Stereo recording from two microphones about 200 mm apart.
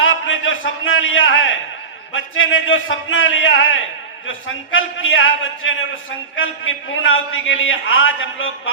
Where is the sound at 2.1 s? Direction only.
80° left.